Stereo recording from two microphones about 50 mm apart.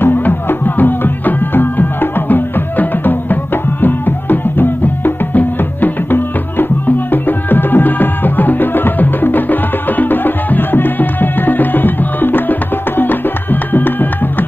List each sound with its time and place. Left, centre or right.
0.0 s music: left